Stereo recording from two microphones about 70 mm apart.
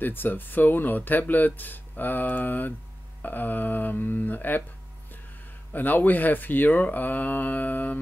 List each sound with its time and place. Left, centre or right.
0.0 s speech: left
5.7 s speech: left